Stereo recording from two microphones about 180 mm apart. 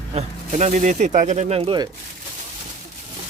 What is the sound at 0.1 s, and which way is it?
Speech, 40° right (ahead or behind).